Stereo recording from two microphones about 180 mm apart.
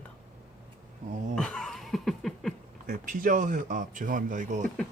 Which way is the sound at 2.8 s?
45° right (ahead or behind).